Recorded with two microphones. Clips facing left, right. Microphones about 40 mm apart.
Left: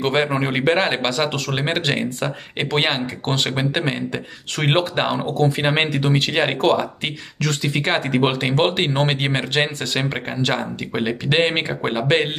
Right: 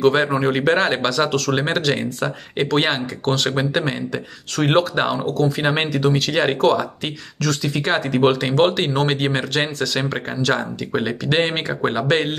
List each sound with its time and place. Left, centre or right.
0.0 s speech: left
1.8 s speech: left
10.9 s speech: centre